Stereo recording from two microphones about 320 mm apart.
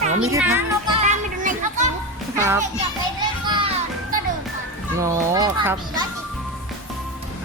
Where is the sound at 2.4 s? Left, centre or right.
Centre.